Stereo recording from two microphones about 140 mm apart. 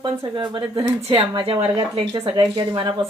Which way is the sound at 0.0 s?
30° right (ahead or behind).